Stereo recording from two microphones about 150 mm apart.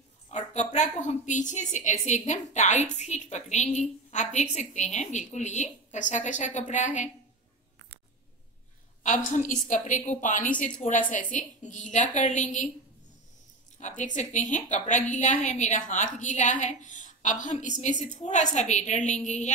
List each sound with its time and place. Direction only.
0.3 s a woman's voice: 50° left (ahead or behind)
9.0 s a woman's voice: 55° left (ahead or behind)
13.7 s a woman's voice: 55° left (ahead or behind)